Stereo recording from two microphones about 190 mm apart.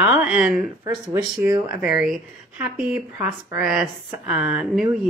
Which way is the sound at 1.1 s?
20° right (ahead or behind).